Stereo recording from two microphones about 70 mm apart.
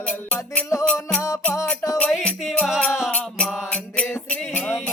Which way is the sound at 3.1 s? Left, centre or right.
Centre.